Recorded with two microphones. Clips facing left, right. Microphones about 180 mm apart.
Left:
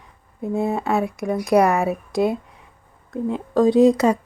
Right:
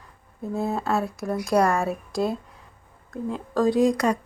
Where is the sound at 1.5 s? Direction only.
15° left (ahead or behind).